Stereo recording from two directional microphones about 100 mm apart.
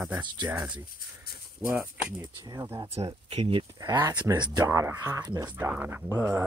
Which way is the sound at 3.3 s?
65° right (ahead or behind).